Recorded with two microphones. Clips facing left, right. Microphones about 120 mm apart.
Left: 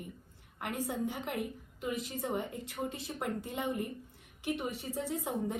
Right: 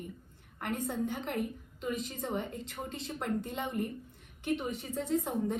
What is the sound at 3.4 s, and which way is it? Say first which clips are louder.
Speech: even; 55° right (ahead or behind).